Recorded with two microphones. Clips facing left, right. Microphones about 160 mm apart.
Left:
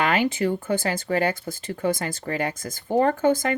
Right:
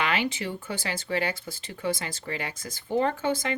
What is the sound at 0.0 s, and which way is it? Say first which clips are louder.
Speech: left 6 dB; 45° left (ahead or behind).